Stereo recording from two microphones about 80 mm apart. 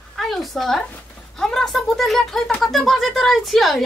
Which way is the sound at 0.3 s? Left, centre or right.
Centre.